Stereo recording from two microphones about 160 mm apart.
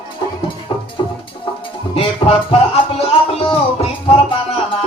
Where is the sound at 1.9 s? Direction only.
35° left (ahead or behind).